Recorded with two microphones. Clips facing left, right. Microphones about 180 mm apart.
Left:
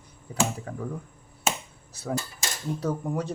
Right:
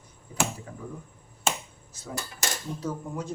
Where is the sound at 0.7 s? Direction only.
70° left (ahead or behind).